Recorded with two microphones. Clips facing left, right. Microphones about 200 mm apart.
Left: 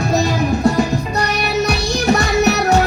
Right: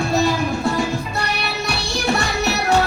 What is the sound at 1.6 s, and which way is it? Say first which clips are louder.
Music: left 2 dB; 40° left (ahead or behind).